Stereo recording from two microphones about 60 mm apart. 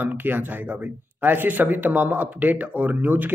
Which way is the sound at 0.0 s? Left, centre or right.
Right.